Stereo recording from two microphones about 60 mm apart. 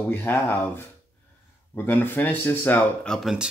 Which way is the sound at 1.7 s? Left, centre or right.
Left.